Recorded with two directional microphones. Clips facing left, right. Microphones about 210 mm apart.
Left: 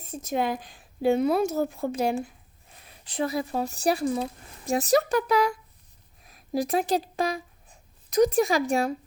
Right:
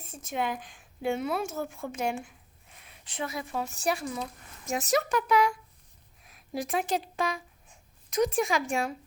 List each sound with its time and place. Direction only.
0.0 s a woman's voice: 35° left (ahead or behind)